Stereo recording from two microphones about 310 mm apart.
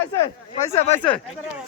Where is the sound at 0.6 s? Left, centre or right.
Centre.